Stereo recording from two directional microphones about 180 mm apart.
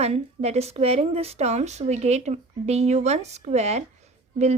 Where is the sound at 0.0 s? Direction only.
35° right (ahead or behind).